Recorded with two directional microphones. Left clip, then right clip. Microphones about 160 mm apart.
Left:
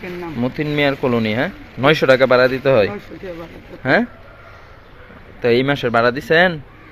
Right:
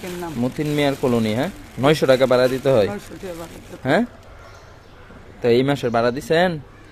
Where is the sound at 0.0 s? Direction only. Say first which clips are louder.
Left 2 dB; 5° right (ahead or behind).